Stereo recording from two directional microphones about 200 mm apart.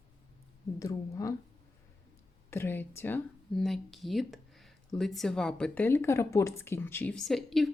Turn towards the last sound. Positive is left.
turn(degrees=0)  # may be behind; listen again after turning